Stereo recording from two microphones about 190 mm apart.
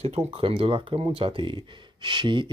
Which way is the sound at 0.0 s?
35° right (ahead or behind).